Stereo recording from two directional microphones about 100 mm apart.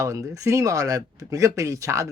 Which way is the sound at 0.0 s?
30° right (ahead or behind).